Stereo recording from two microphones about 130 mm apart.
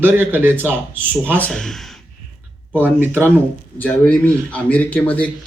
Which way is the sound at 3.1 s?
15° left (ahead or behind).